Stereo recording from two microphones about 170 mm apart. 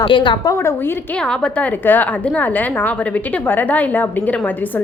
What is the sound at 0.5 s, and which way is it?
A woman's voice, 15° left (ahead or behind).